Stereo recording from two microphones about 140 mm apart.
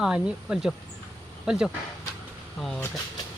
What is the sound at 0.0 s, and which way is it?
Speech, 5° right (ahead or behind).